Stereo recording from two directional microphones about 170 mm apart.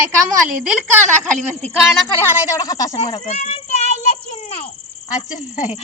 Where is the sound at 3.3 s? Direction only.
45° left (ahead or behind).